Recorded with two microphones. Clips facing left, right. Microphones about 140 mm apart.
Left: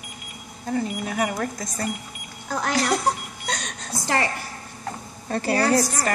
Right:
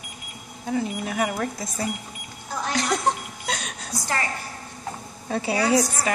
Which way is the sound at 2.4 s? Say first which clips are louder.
Left 3 dB; 80° left.